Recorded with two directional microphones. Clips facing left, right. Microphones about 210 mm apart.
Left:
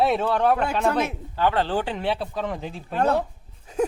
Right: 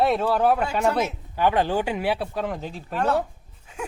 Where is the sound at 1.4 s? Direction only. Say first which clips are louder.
Right 1 dB; 15° right (ahead or behind).